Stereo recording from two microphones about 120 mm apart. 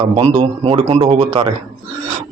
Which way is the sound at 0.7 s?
65° right (ahead or behind).